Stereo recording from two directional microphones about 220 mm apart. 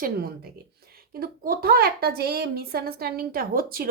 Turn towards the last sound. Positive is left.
turn(degrees=-40)  # may be behind; listen again after turning